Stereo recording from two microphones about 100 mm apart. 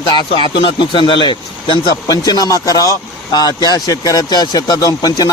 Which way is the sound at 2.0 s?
40° left (ahead or behind).